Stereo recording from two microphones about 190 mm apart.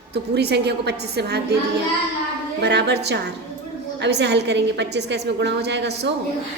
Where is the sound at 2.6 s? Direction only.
60° right (ahead or behind).